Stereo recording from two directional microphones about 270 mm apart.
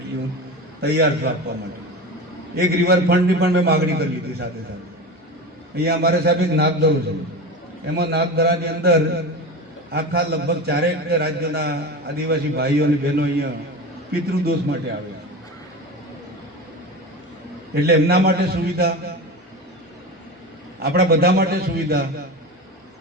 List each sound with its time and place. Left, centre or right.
0.8 s a man's voice: right
2.6 s a man's voice: right
5.7 s a man's voice: right
17.7 s a man's voice: right
20.7 s a man's voice: right